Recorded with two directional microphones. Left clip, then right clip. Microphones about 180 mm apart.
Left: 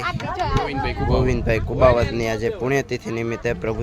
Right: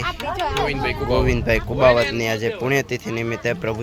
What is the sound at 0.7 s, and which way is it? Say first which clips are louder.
Speech: right 2 dB; 70° left (ahead or behind).